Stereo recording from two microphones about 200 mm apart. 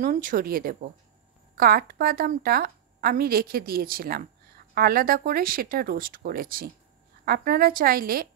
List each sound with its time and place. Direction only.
0.0 s a woman's voice: 40° right (ahead or behind)